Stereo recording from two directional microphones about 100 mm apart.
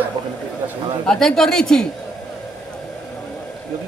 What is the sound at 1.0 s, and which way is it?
Speech, 5° left (ahead or behind).